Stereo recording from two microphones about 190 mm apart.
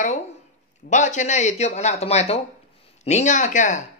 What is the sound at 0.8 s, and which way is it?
Speech, 40° left (ahead or behind).